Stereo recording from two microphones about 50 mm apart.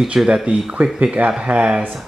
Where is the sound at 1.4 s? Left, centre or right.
Right.